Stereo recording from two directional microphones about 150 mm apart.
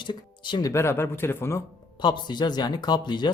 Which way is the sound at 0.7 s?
15° left (ahead or behind).